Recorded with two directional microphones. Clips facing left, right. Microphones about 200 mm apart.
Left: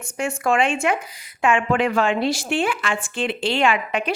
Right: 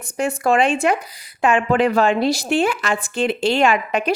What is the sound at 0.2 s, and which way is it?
Speech, 35° right (ahead or behind).